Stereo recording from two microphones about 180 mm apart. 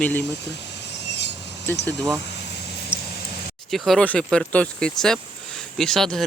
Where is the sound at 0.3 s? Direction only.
75° left (ahead or behind).